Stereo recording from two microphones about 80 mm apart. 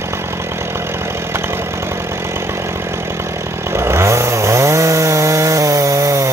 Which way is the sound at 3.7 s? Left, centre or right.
Right.